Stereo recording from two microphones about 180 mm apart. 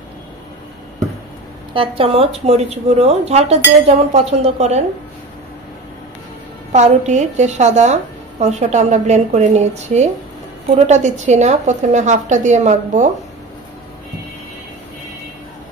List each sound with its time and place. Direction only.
1.7 s a woman's voice: 30° right (ahead or behind)
6.7 s a woman's voice: 40° right (ahead or behind)